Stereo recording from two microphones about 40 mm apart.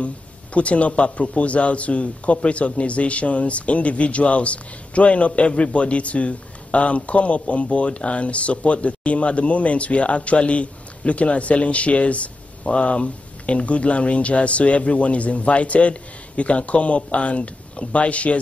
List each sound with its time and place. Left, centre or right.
0.0 s a man's voice: left